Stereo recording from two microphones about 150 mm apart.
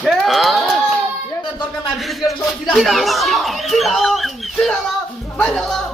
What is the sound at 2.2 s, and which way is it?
Speech, centre (ahead or behind).